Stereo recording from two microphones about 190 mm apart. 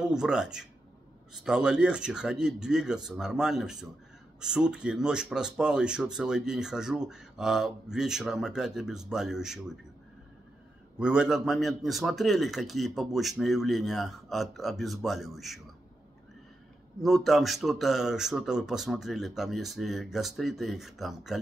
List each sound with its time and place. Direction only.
0.0 s speech: 5° right (ahead or behind)
11.0 s speech: 5° right (ahead or behind)
17.0 s speech: centre (ahead or behind)